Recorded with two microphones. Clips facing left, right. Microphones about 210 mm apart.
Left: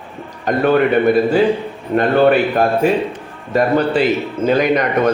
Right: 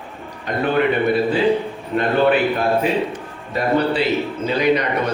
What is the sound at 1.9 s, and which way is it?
A man's voice, 45° left (ahead or behind).